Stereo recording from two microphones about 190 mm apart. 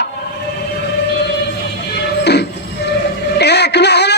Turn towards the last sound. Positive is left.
turn(degrees=60)  # may be behind; listen again after turning